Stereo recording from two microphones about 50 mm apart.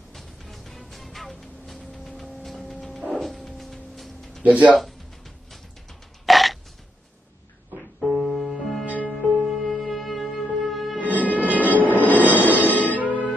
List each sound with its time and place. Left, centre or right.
0.1 s music: centre
3.1 s dog: centre
4.4 s speech: right
4.7 s burping: centre
8.0 s music: centre
8.8 s music: right
9.5 s music: centre
11.0 s music: right
11.7 s train: left
12.2 s music: left